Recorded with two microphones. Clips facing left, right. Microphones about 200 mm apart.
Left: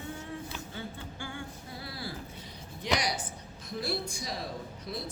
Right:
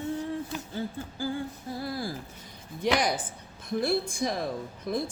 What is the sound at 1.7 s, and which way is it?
A woman's voice, 50° right (ahead or behind).